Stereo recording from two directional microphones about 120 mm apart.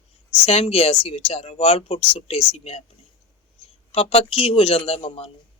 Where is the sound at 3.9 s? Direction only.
55° left (ahead or behind).